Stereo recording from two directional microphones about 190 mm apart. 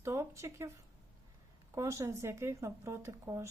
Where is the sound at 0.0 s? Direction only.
15° right (ahead or behind).